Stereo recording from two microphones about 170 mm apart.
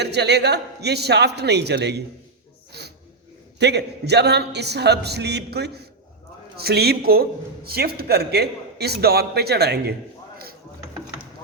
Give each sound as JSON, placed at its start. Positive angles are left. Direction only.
{"t": 0.0, "sound": "a man's voice", "side_deg": -80}
{"t": 2.7, "sound": "snort", "side_deg": -75}
{"t": 3.6, "sound": "a man's voice", "side_deg": -80}